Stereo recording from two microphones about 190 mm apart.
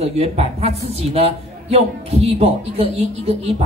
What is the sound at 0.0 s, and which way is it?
Speech, 35° right (ahead or behind).